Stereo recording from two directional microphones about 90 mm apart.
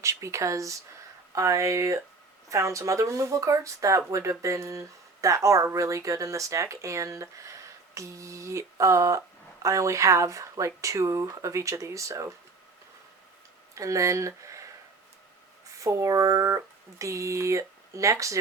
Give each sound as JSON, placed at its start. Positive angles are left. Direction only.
{"t": 0.0, "sound": "speech", "side_deg": -35}
{"t": 13.7, "sound": "speech", "side_deg": -35}
{"t": 15.8, "sound": "speech", "side_deg": -35}